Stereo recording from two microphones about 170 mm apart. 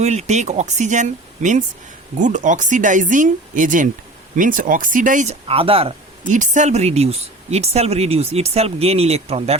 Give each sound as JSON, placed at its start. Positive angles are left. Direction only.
{"t": 0.0, "sound": "speech", "side_deg": -40}
{"t": 6.3, "sound": "speech", "side_deg": -45}